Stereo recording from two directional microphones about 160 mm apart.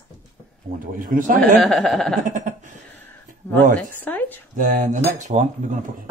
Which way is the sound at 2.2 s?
50° right (ahead or behind).